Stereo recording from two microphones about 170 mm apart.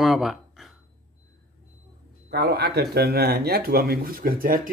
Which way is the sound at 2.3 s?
70° right (ahead or behind).